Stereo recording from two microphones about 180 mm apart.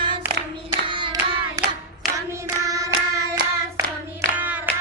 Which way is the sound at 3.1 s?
15° right (ahead or behind).